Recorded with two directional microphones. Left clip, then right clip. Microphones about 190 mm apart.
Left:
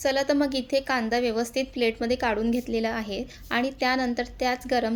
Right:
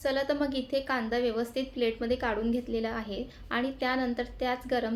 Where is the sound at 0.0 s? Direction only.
45° left (ahead or behind).